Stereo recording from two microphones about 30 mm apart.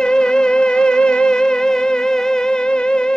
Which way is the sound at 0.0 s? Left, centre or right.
Left.